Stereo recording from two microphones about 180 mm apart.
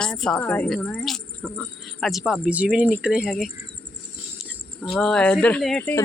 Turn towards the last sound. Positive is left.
turn(degrees=10)  # may be behind; listen again after turning